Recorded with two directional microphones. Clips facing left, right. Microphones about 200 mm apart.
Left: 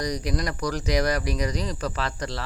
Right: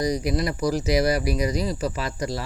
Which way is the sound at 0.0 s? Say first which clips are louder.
Right 4 dB; 10° right (ahead or behind).